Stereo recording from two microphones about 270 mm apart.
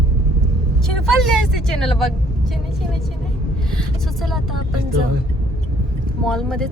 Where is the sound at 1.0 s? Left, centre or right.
Centre.